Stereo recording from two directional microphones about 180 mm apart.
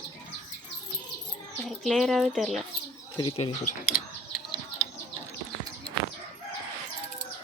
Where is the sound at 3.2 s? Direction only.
30° left (ahead or behind).